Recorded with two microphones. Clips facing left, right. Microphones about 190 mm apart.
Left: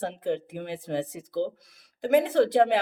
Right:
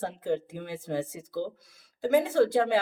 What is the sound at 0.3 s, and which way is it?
A woman's voice, 20° left (ahead or behind).